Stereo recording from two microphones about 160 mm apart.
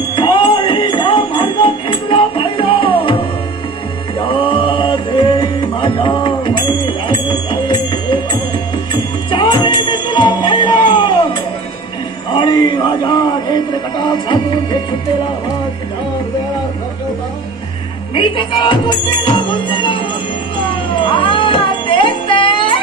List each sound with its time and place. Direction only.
0.1 s jingle bell: 30° left (ahead or behind)
4.2 s music: 30° left (ahead or behind)
12.4 s music: 30° left (ahead or behind)
18.1 s music: 30° left (ahead or behind)